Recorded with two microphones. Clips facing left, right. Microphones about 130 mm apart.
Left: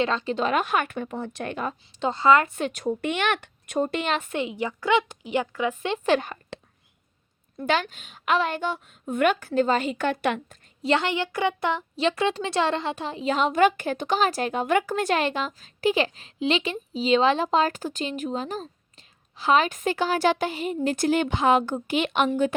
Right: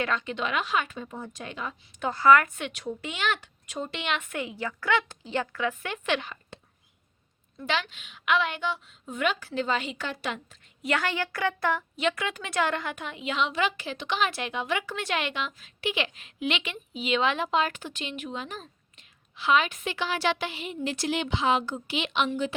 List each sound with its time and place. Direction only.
0.0 s a woman's voice: 30° left (ahead or behind); by 1.7 s 55° left (ahead or behind)
2.0 s a woman's voice: 25° left (ahead or behind)
2.6 s a woman's voice: 40° left (ahead or behind)
2.9 s speech: 55° left (ahead or behind); by 4.4 s 35° left (ahead or behind)
4.4 s a woman's voice: 20° left (ahead or behind)
6.1 s a woman's voice: 40° left (ahead or behind)
6.5 s whispering: 75° left (ahead or behind)
7.5 s a woman's voice: 45° left (ahead or behind)
10.8 s a woman's voice: 25° left (ahead or behind); by 22.5 s 50° left (ahead or behind)